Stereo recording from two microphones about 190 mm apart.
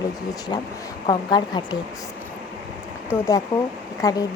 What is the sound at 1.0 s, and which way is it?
Speech, 20° left (ahead or behind).